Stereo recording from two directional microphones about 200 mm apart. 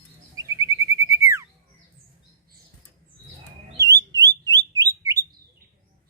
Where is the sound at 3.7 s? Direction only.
15° right (ahead or behind).